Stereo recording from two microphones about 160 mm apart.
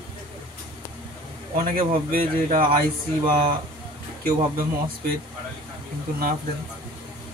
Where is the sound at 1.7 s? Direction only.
60° right (ahead or behind).